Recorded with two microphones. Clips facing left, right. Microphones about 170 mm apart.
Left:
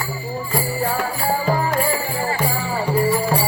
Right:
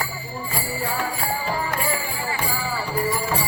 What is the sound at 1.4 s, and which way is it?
Music, 45° left (ahead or behind).